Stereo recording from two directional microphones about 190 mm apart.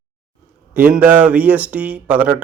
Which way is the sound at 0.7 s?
10° right (ahead or behind).